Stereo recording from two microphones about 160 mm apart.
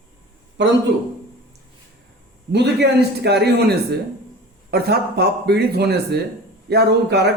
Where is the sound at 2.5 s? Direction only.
90° right.